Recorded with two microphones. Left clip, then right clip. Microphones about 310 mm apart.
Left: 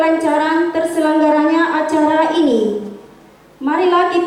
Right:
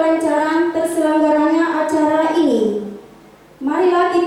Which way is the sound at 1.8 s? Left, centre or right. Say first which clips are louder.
Left 2 dB; centre.